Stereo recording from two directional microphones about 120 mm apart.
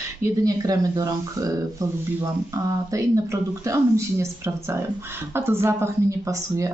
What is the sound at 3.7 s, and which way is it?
Speech, 25° right (ahead or behind).